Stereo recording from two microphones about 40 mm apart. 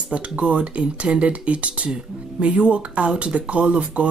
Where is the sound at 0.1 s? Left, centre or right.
Right.